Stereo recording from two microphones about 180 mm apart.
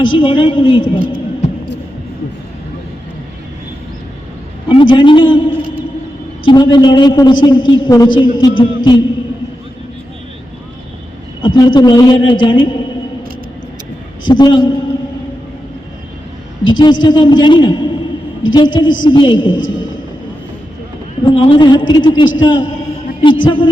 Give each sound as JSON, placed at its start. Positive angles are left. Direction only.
{"t": 0.0, "sound": "a man's voice", "side_deg": 30}
{"t": 4.7, "sound": "a man's voice", "side_deg": 30}
{"t": 8.8, "sound": "music", "side_deg": 25}
{"t": 11.4, "sound": "a man's voice", "side_deg": 25}
{"t": 14.3, "sound": "a man's voice", "side_deg": 25}
{"t": 16.6, "sound": "a man's voice", "side_deg": 25}
{"t": 21.2, "sound": "a man's voice", "side_deg": 30}